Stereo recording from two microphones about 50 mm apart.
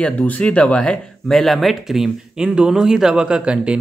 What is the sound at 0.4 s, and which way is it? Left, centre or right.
Speech, left.